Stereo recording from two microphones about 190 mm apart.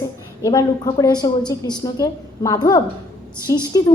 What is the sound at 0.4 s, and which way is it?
A woman's voice, 20° left (ahead or behind).